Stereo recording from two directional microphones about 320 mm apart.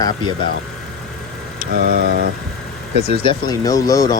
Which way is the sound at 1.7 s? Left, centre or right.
Right.